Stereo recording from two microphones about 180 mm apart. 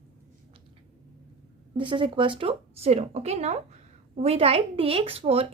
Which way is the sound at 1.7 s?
30° right (ahead or behind).